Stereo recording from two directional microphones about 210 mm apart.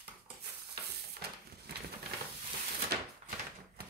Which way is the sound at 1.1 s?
50° right (ahead or behind).